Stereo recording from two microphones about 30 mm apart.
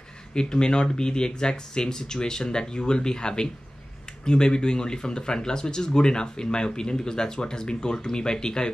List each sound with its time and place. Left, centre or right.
0.3 s speech: left